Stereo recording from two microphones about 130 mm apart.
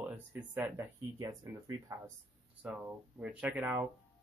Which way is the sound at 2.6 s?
10° right (ahead or behind).